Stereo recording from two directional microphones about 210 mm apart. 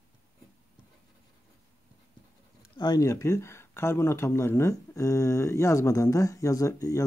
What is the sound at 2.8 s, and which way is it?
Speech, 15° left (ahead or behind).